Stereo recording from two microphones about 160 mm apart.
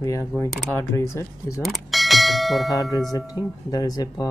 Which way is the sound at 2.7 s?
25° left (ahead or behind).